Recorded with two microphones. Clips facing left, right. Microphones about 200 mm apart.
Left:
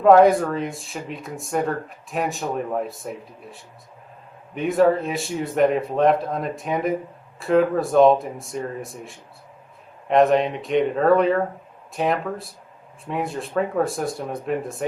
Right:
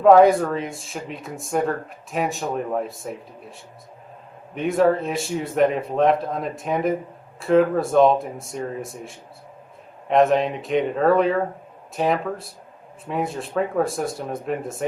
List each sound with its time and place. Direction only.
0.0 s speech: centre (ahead or behind)